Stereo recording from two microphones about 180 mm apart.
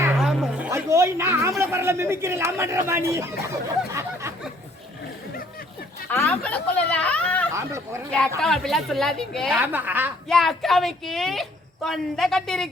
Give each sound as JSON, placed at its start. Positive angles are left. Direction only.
{"t": 0.2, "sound": "music", "side_deg": 0}
{"t": 0.7, "sound": "a woman's voice", "side_deg": -15}
{"t": 3.9, "sound": "a sound", "side_deg": -15}
{"t": 6.1, "sound": "speech", "side_deg": 10}
{"t": 7.5, "sound": "a woman's voice", "side_deg": -15}
{"t": 8.4, "sound": "a woman's voice", "side_deg": 0}
{"t": 9.6, "sound": "a woman's voice", "side_deg": -10}
{"t": 10.2, "sound": "a woman's voice", "side_deg": 0}